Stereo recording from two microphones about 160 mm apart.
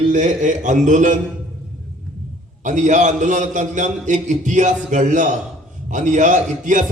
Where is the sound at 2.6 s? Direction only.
50° right (ahead or behind).